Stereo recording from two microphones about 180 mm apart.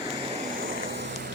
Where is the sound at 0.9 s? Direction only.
75° right (ahead or behind).